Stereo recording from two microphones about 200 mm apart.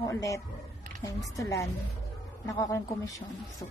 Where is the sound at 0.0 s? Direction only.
15° left (ahead or behind).